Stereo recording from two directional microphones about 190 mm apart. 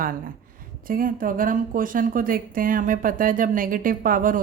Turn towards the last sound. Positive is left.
turn(degrees=-45)  # may be behind; listen again after turning